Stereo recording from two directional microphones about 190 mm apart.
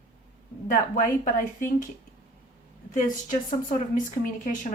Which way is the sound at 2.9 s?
40° left (ahead or behind).